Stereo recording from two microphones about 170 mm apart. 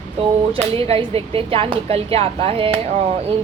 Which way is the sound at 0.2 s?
35° right (ahead or behind).